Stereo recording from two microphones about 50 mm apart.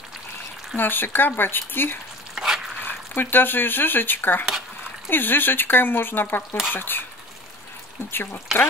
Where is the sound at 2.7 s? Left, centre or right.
Left.